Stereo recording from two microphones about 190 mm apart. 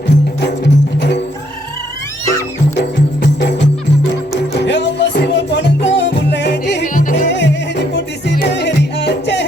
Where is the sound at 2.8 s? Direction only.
65° left (ahead or behind).